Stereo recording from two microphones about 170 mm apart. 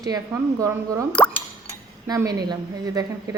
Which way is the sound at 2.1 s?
20° right (ahead or behind).